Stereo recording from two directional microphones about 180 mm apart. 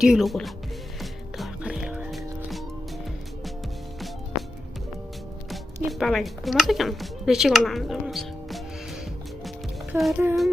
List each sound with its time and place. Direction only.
0.0 s speech: centre (ahead or behind)
1.4 s music: 5° right (ahead or behind)
5.5 s speech: centre (ahead or behind)
10.0 s speech: 10° right (ahead or behind)